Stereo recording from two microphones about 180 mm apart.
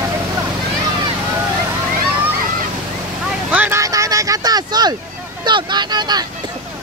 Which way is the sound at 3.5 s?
10° right (ahead or behind).